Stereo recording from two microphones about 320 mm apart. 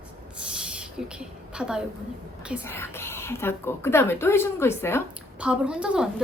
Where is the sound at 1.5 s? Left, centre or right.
Centre.